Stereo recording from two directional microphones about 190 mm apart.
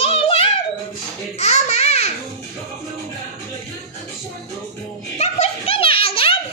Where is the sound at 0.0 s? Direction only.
30° left (ahead or behind).